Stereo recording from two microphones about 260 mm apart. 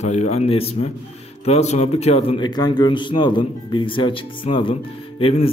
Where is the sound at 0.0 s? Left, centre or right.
Left.